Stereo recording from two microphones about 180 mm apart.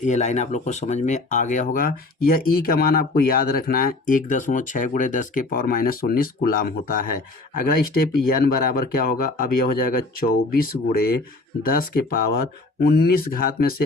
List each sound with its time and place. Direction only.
0.0 s speech: 40° left (ahead or behind)